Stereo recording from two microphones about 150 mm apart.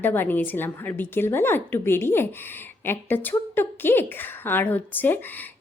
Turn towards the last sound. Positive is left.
turn(degrees=10)  # may be behind; listen again after turning